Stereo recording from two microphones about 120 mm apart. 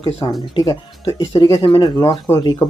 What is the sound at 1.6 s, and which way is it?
Speech, 45° left (ahead or behind).